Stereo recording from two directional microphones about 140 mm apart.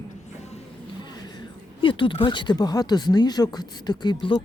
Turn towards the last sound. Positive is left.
turn(degrees=30)  # may be behind; listen again after turning